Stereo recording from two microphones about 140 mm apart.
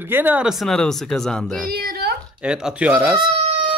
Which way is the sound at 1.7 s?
90° right.